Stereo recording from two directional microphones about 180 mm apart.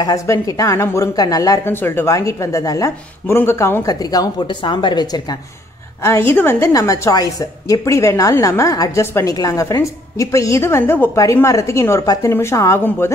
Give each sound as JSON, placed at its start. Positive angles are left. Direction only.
{"t": 0.0, "sound": "a woman's voice", "side_deg": 20}
{"t": 6.0, "sound": "a woman's voice", "side_deg": 15}